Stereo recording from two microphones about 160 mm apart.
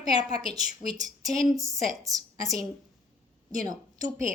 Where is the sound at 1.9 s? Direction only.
20° right (ahead or behind).